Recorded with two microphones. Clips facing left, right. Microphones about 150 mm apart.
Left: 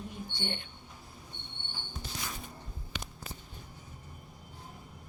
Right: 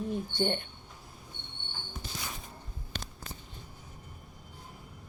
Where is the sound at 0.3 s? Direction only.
45° right (ahead or behind).